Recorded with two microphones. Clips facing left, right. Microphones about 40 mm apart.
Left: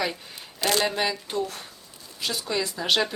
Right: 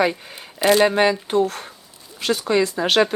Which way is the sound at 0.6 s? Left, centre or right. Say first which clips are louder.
Right 9 dB; centre.